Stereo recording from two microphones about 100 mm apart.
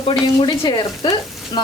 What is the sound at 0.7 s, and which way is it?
Frying, 45° left (ahead or behind).